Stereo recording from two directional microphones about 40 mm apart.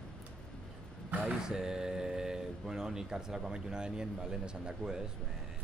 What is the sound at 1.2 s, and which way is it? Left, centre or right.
Speech, centre.